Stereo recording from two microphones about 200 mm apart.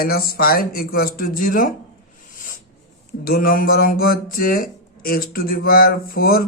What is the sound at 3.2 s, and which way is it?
Speech, 45° left (ahead or behind).